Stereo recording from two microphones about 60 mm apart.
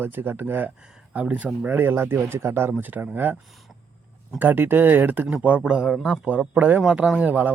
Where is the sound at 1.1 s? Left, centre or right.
Right.